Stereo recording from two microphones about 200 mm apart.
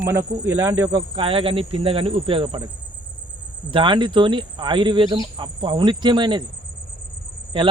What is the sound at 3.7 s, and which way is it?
Speech, 25° right (ahead or behind).